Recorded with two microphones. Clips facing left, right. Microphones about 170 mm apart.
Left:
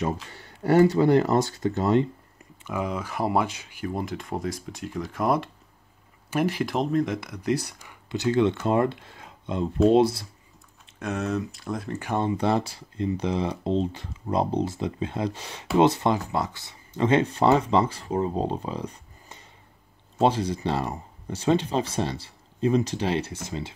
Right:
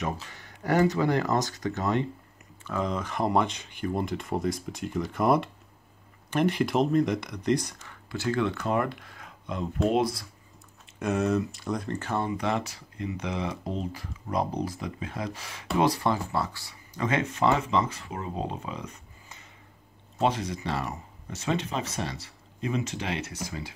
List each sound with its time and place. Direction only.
0.0 s speech: 30° left (ahead or behind)
2.6 s speech: 10° left (ahead or behind); by 10.2 s 30° left (ahead or behind)
11.0 s speech: centre (ahead or behind)
12.0 s speech: 15° left (ahead or behind)
12.3 s speech: 30° left (ahead or behind)